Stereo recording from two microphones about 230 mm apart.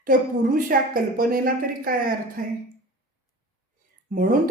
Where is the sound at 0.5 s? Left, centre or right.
Right.